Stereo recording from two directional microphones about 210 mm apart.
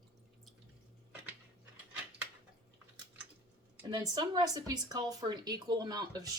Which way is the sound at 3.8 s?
20° right (ahead or behind).